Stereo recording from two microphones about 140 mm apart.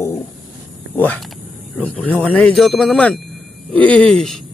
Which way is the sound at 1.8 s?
10° left (ahead or behind).